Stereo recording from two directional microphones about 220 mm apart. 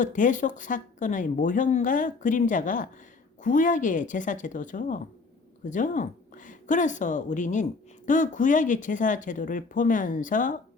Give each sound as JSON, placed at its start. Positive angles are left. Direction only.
{"t": 0.0, "sound": "a woman's voice", "side_deg": 35}